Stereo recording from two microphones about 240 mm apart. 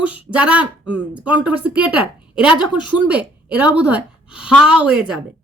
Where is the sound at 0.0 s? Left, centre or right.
Centre.